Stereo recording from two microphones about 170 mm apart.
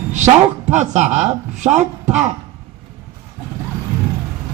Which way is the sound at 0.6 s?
40° right (ahead or behind).